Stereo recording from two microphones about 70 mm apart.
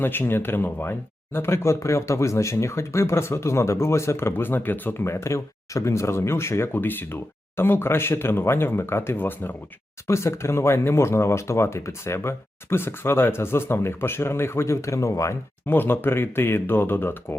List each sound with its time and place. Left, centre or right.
0.0 s speech: left
10.1 s speech: left
15.6 s speech: left